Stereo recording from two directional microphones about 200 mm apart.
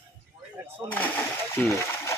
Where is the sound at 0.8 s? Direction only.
15° right (ahead or behind).